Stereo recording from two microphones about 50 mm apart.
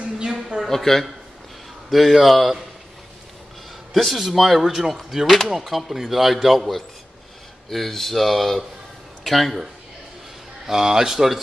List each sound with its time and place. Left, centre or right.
0.0 s a sound: centre
0.7 s speech: centre
3.9 s speech: centre
10.7 s speech: centre